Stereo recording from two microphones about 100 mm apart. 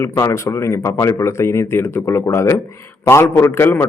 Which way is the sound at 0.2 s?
30° left (ahead or behind).